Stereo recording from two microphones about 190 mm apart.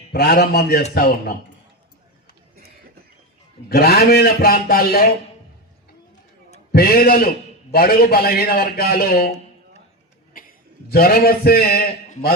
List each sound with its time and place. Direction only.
0.1 s a man's voice: 55° left (ahead or behind)
3.7 s a man's voice: 55° left (ahead or behind)
6.7 s a man's voice: 55° left (ahead or behind)
10.3 s a sound: 45° left (ahead or behind)
10.9 s a man's voice: 50° left (ahead or behind)